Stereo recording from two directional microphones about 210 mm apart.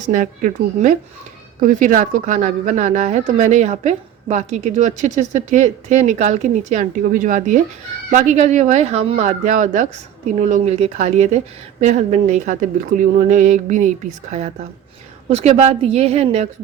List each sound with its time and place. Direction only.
1.6 s speech: 40° right (ahead or behind)